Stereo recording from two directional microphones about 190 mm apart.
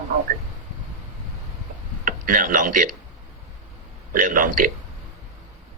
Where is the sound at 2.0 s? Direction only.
45° right (ahead or behind).